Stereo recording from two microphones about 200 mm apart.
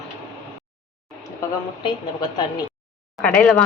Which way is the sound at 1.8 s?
20° left (ahead or behind).